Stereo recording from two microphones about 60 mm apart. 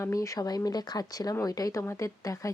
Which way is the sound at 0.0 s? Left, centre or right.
Left.